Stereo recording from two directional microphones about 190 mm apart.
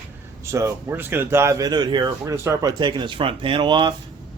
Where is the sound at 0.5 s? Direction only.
15° right (ahead or behind).